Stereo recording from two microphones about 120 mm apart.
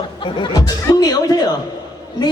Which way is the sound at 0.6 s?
30° left (ahead or behind).